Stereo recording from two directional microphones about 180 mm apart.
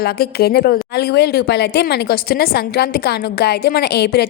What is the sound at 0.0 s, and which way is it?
Speech, 60° left (ahead or behind).